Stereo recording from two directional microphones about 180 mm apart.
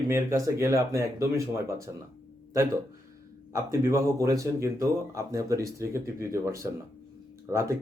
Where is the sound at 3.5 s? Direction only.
15° right (ahead or behind).